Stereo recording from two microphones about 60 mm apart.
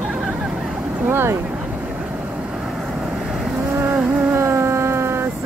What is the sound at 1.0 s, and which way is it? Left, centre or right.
Boat, right.